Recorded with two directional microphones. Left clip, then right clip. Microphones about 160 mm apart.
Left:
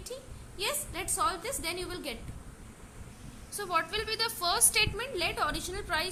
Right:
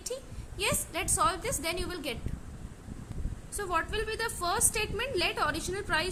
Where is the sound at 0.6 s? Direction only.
20° right (ahead or behind).